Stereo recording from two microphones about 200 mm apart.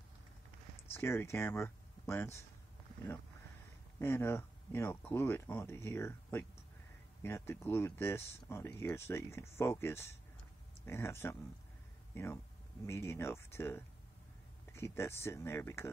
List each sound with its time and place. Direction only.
0.9 s speech: 15° left (ahead or behind)
4.0 s speech: 10° left (ahead or behind)